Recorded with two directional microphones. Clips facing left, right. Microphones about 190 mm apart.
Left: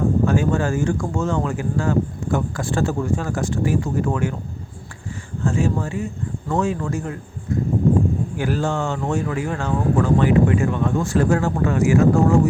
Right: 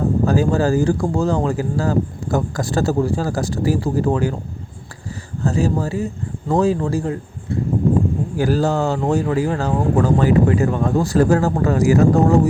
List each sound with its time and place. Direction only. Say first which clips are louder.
0.3 s speech: right 3 dB; 35° right (ahead or behind)
5.4 s speech: right 2 dB; 35° right (ahead or behind)